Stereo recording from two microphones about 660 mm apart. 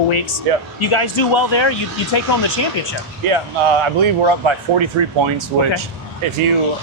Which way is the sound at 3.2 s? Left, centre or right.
Right.